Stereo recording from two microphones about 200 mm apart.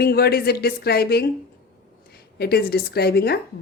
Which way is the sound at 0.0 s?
50° left (ahead or behind).